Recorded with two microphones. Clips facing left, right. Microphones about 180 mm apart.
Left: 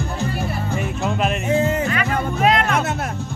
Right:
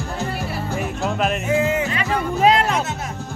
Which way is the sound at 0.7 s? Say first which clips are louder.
Even; centre (ahead or behind).